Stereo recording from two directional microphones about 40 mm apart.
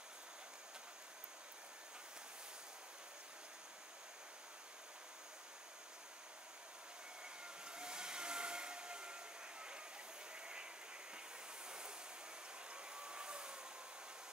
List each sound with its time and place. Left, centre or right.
7.6 s vacuum cleaner: right
10.4 s a sound: right
12.7 s vacuum cleaner: right